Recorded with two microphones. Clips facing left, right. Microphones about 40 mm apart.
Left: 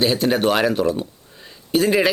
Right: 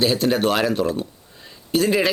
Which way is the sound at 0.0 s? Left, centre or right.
Centre.